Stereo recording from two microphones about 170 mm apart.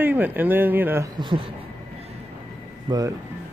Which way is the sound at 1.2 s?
30° right (ahead or behind).